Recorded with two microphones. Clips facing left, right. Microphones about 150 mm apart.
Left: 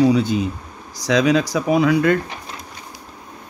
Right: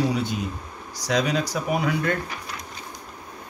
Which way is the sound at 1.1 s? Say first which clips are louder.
Left 7 dB; 90° left.